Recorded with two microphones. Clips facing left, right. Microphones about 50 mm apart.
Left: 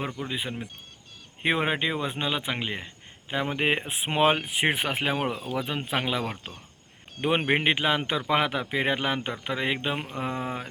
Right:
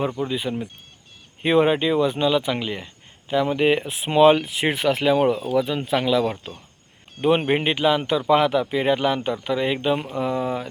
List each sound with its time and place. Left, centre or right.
0.3 s speech: left